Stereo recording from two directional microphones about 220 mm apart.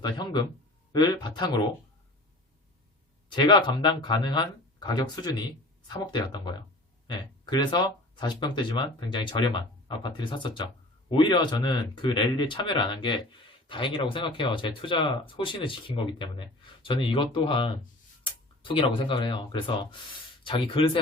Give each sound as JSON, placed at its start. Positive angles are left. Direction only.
{"t": 0.0, "sound": "speech", "side_deg": 20}
{"t": 3.2, "sound": "speech", "side_deg": 20}